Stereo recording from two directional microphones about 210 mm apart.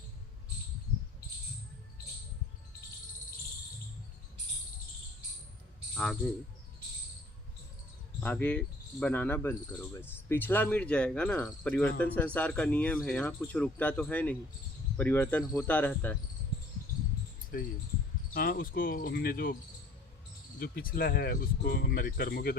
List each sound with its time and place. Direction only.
5.9 s speech: 5° left (ahead or behind)
8.2 s cricket: 10° left (ahead or behind)
17.5 s speech: 45° left (ahead or behind)
20.6 s speech: 45° left (ahead or behind)